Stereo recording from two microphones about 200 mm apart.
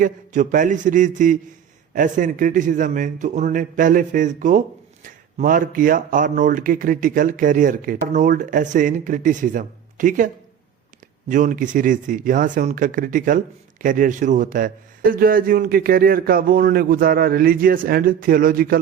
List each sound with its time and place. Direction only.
0.0 s speech: 40° right (ahead or behind)
11.3 s speech: 40° right (ahead or behind)